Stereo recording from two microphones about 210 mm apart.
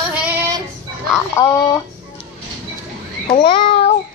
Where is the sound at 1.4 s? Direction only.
15° left (ahead or behind).